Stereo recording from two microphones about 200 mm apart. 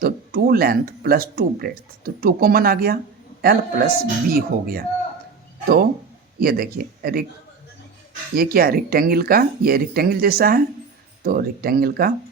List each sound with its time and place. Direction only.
0.0 s speech: 45° right (ahead or behind)
8.4 s speech: 50° right (ahead or behind)